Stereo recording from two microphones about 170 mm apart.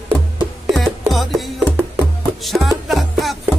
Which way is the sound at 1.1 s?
Centre (ahead or behind).